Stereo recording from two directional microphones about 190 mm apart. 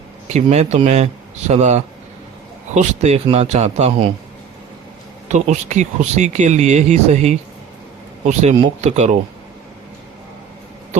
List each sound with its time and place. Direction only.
0.3 s speech: 35° right (ahead or behind)
5.3 s speech: 40° right (ahead or behind)